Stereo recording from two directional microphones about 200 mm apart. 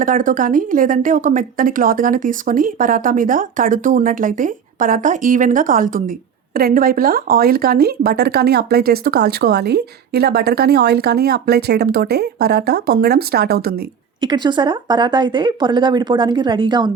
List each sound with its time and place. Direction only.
0.0 s speech: 40° right (ahead or behind)
14.2 s speech: 20° right (ahead or behind)